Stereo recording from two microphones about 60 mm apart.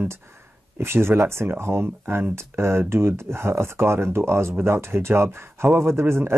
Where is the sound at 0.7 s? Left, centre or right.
Right.